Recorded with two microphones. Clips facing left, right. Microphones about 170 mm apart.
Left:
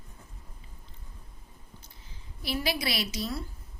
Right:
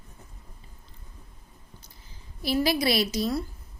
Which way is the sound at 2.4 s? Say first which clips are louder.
Right 7 dB; 40° right (ahead or behind).